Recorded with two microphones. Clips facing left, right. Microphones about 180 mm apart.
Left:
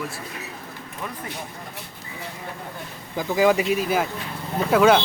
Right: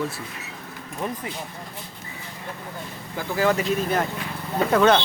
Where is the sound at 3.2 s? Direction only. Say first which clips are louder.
Left 3 dB; 15° left (ahead or behind).